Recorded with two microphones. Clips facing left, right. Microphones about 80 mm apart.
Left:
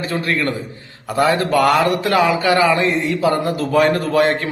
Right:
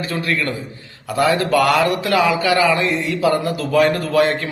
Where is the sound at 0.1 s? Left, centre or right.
Left.